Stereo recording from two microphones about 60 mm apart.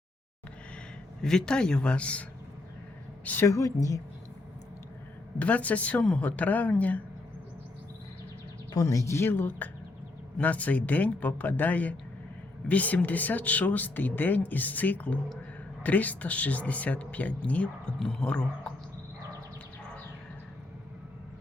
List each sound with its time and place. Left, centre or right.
1.2 s a man's voice: centre
3.4 s a woman's voice: left
5.4 s speech: left
8.7 s a woman's voice: left
9.2 s speech: left
10.3 s speech: left
18.0 s a man's voice: centre